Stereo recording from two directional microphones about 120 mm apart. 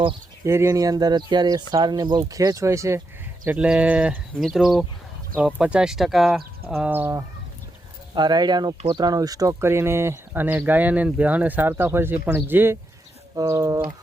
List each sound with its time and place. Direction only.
0.4 s speech: 25° right (ahead or behind)
3.4 s speech: 10° right (ahead or behind)
8.1 s speech: 35° right (ahead or behind)